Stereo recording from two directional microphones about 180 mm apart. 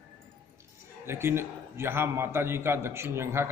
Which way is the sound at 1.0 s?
15° right (ahead or behind).